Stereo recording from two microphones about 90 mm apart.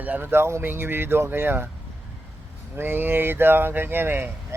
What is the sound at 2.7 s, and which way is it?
Speech, 25° right (ahead or behind).